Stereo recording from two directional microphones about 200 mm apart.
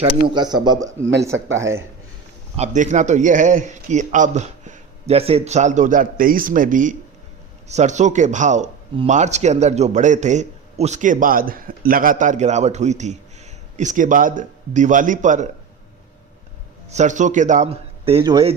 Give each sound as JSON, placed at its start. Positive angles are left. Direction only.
{"t": 0.3, "sound": "speech", "side_deg": -20}
{"t": 2.6, "sound": "speech", "side_deg": -35}
{"t": 16.9, "sound": "speech", "side_deg": -35}